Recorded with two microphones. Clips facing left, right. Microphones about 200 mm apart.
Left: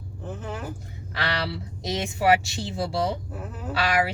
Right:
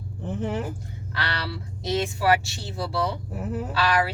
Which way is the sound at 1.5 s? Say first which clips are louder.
Right 2 dB; 15° left (ahead or behind).